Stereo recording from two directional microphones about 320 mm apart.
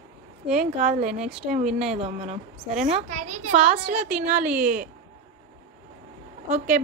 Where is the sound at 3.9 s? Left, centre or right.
Centre.